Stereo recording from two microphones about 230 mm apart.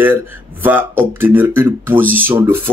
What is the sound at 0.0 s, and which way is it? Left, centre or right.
Speech, centre.